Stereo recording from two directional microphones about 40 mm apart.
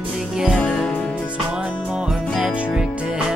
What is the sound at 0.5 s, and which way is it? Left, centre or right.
Music, left.